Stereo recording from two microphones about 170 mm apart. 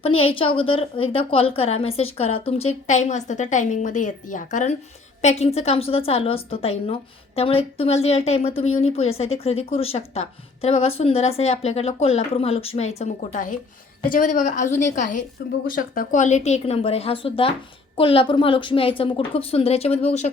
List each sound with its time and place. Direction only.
0.0 s a woman's voice: 30° left (ahead or behind)